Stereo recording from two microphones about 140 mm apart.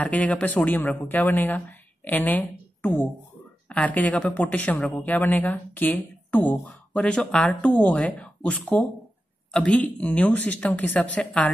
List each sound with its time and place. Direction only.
0.0 s a woman's voice: 10° left (ahead or behind)